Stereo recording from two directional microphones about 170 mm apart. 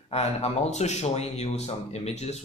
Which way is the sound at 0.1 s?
40° left (ahead or behind).